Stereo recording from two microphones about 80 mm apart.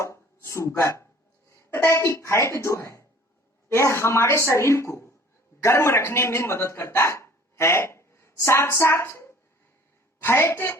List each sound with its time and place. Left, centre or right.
0.0 s a woman's voice: left